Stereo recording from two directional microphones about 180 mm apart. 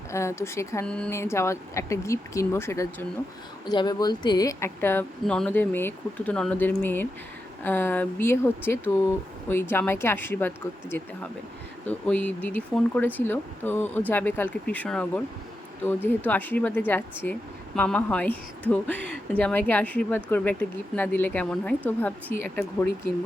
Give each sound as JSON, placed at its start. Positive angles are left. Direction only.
{"t": 0.1, "sound": "speech", "side_deg": 15}